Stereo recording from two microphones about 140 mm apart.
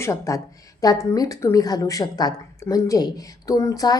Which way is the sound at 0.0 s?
20° left (ahead or behind).